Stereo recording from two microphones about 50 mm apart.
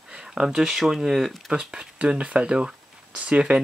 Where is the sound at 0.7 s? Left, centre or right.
Centre.